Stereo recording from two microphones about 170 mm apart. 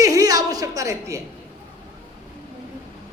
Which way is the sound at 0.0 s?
20° right (ahead or behind).